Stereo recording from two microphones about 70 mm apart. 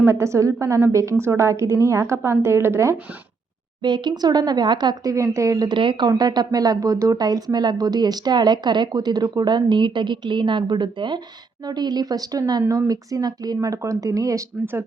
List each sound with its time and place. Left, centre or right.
0.0 s a woman's voice: right
3.8 s speech: right
5.0 s a woman's voice: right
6.1 s speech: right
11.6 s speech: right
12.6 s speech: right
14.6 s speech: right